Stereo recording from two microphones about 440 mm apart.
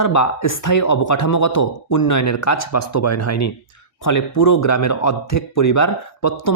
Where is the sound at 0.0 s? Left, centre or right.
Left.